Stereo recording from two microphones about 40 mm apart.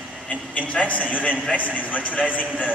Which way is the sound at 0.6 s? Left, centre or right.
Left.